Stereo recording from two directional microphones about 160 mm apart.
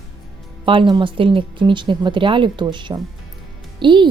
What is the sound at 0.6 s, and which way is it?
A woman's voice, 30° right (ahead or behind).